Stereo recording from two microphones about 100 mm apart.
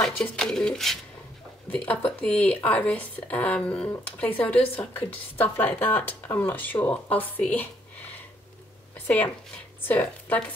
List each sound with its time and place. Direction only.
0.0 s speech: 5° left (ahead or behind)
9.0 s speech: 15° left (ahead or behind)